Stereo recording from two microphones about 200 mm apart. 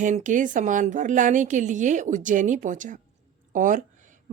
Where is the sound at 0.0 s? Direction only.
40° right (ahead or behind).